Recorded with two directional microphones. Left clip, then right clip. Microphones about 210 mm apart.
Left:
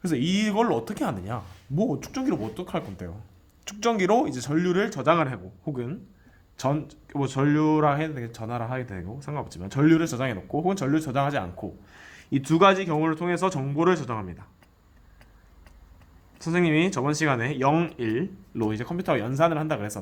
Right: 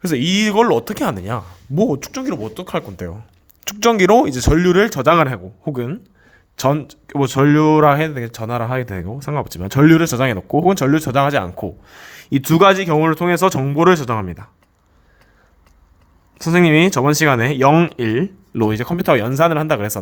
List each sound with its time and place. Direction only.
0.0 s speech: 40° right (ahead or behind)
16.4 s speech: 50° right (ahead or behind)